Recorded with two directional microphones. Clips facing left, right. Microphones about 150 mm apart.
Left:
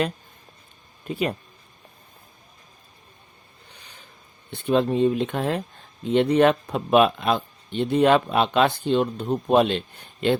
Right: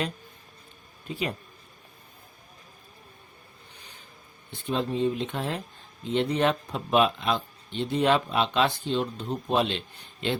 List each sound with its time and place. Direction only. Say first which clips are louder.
1.1 s speech: left 5 dB; 60° left (ahead or behind)
4.6 s speech: left 7 dB; 60° left (ahead or behind)